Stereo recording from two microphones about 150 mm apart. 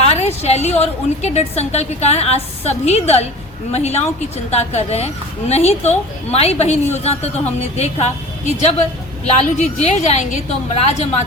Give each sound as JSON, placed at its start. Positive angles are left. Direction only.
{"t": 0.0, "sound": "a woman's voice", "side_deg": 45}
{"t": 9.2, "sound": "a woman's voice", "side_deg": 50}